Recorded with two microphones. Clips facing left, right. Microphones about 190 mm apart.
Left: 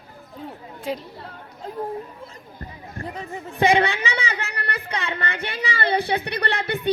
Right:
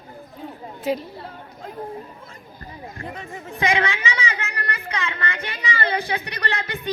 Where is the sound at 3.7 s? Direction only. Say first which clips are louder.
Left 2 dB; 35° left (ahead or behind).